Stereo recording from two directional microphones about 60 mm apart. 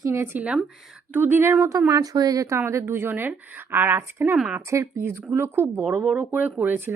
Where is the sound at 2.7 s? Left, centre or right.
Right.